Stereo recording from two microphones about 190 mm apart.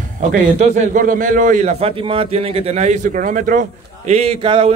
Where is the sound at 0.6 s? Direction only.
40° right (ahead or behind).